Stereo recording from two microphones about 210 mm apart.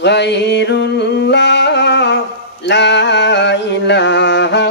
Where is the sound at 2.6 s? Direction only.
55° left (ahead or behind).